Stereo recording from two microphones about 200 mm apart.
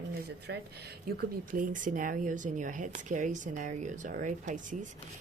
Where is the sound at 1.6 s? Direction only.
40° right (ahead or behind).